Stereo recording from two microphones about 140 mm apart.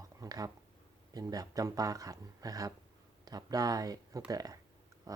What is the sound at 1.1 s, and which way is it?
Speech, 25° right (ahead or behind).